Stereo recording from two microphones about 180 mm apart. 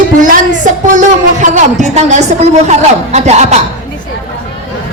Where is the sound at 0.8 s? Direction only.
45° right (ahead or behind).